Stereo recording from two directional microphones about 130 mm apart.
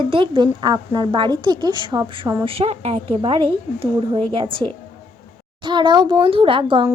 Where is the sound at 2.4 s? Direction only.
50° right (ahead or behind).